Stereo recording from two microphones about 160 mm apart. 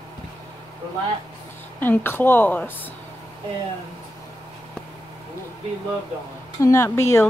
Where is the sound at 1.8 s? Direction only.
15° left (ahead or behind).